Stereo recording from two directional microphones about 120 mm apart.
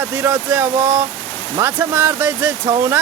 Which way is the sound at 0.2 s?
15° right (ahead or behind).